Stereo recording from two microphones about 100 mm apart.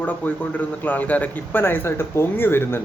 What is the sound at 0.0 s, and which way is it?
A man's voice, 15° left (ahead or behind).